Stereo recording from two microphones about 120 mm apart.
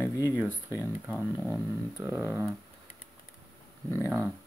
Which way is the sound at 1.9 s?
20° right (ahead or behind).